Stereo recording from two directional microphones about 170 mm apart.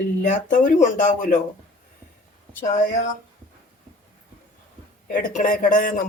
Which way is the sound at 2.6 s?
45° left (ahead or behind).